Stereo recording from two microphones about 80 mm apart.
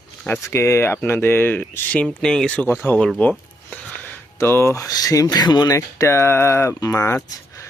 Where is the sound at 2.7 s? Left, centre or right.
Left.